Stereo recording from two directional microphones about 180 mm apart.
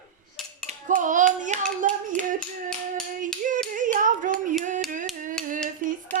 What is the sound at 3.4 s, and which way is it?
Clapping, 45° right (ahead or behind).